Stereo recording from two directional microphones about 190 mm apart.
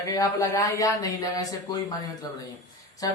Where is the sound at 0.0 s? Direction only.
15° left (ahead or behind).